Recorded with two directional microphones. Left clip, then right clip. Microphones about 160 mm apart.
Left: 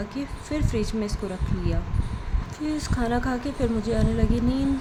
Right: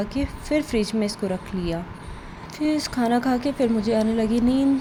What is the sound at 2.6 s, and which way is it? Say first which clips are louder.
A woman's voice: right 5 dB; 20° right (ahead or behind).